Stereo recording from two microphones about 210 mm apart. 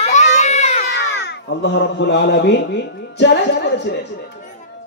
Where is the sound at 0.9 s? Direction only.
55° left (ahead or behind).